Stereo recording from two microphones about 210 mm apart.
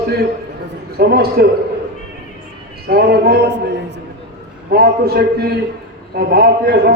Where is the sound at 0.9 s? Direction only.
45° right (ahead or behind).